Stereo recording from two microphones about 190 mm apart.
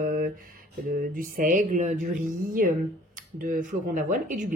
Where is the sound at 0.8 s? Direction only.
50° right (ahead or behind).